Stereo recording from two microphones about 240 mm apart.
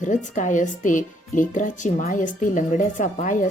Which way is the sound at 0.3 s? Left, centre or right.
Left.